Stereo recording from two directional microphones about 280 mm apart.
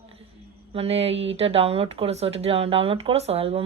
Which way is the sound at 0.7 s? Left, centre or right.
Right.